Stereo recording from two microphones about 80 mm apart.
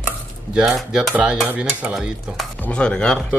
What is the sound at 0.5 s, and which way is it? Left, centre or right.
Cutlery, centre.